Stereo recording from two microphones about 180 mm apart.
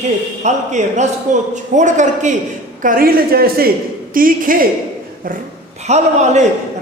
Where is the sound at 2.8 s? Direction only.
55° right (ahead or behind).